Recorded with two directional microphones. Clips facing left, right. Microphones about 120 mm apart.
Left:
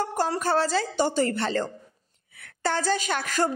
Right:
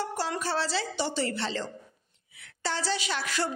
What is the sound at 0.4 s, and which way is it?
A woman's voice, 45° left (ahead or behind).